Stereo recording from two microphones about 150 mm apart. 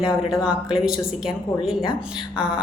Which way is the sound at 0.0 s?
25° left (ahead or behind).